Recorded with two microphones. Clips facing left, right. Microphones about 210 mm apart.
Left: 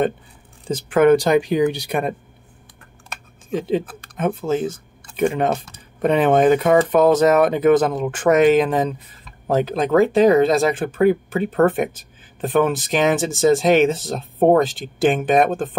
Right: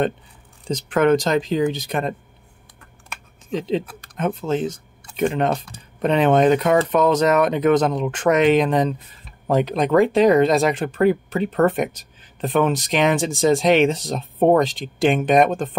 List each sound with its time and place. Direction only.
0.7 s speech: 5° left (ahead or behind)
3.4 s speech: 10° left (ahead or behind)
10.2 s speech: 5° left (ahead or behind)